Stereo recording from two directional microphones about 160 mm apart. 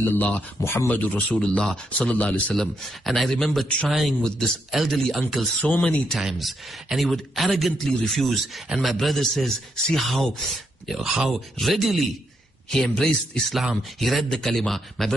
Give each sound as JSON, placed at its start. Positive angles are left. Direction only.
{"t": 0.1, "sound": "speech", "side_deg": 10}